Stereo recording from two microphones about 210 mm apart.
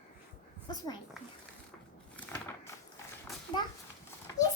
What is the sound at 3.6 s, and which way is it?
Speech, 20° left (ahead or behind).